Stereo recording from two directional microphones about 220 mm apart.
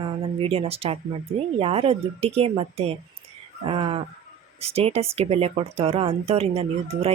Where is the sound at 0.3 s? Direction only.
25° right (ahead or behind).